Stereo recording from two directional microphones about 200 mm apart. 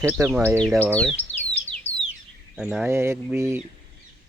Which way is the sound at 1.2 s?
10° left (ahead or behind).